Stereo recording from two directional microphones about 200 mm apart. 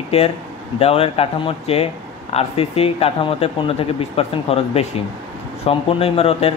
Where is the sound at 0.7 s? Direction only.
30° left (ahead or behind).